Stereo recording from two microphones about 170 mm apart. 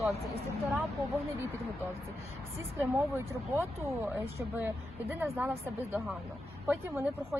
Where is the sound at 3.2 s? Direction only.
15° right (ahead or behind).